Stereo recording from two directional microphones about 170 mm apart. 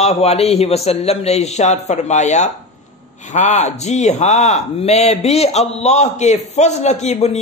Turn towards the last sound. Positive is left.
turn(degrees=40)  # may be behind; listen again after turning